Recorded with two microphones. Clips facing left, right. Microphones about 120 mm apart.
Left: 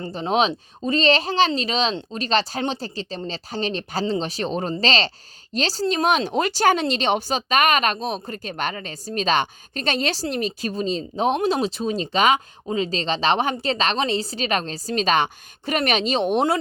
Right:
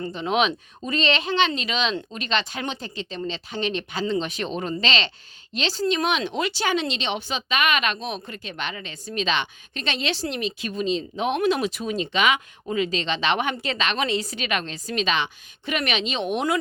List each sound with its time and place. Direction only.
0.0 s speech: 35° left (ahead or behind)